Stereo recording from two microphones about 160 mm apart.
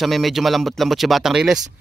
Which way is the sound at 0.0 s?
Centre (ahead or behind).